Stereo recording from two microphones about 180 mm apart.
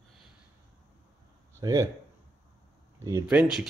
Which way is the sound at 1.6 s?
20° right (ahead or behind).